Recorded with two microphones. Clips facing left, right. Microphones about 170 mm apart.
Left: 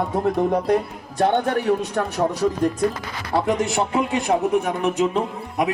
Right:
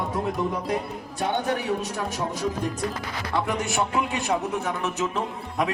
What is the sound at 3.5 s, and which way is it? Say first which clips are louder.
Speech: left 5 dB; 20° left (ahead or behind).